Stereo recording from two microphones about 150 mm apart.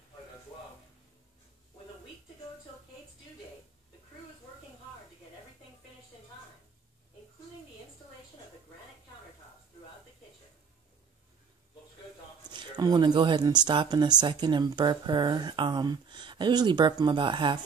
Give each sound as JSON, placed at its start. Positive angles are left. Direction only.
{"t": 12.4, "sound": "speech", "side_deg": -30}